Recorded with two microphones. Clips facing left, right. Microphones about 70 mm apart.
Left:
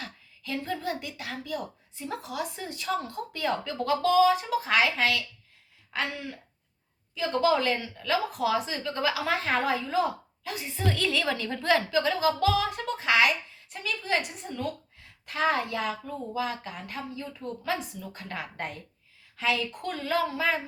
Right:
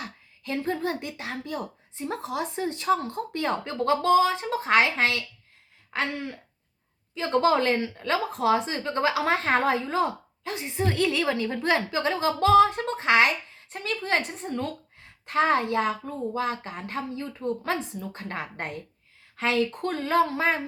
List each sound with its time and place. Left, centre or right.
0.0 s a woman's voice: right